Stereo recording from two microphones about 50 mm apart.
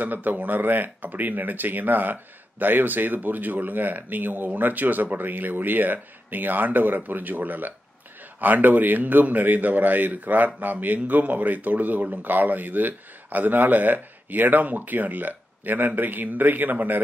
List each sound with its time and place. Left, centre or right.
0.0 s a man's voice: right